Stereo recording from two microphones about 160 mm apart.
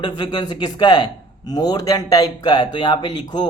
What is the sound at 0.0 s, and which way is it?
A man's voice, 25° left (ahead or behind).